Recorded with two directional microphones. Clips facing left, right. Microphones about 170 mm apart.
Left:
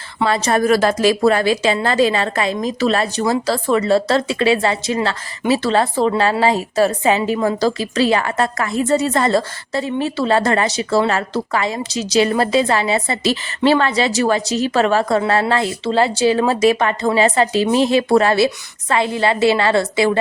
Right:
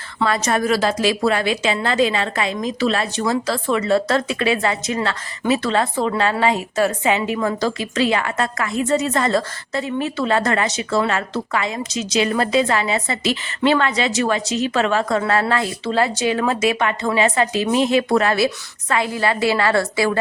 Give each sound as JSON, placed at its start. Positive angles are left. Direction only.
{"t": 0.3, "sound": "a woman's voice", "side_deg": 30}
{"t": 0.6, "sound": "a woman's voice", "side_deg": 50}